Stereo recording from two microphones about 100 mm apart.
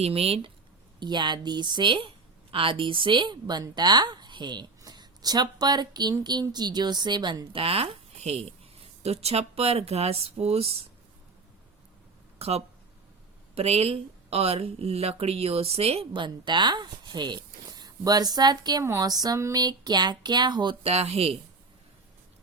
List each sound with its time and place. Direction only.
0.0 s speech: 80° right
0.9 s a woman's voice: 45° right (ahead or behind)
7.5 s speech: 70° right (ahead or behind); by 10.8 s 90° right
12.4 s speech: 90° right; by 18.8 s 45° right (ahead or behind)
18.8 s a woman's voice: 35° right (ahead or behind); by 20.7 s 50° right (ahead or behind)
20.8 s speech: 90° right